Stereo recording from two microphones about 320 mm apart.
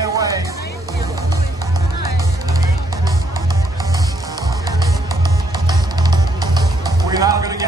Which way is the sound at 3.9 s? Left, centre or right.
Centre.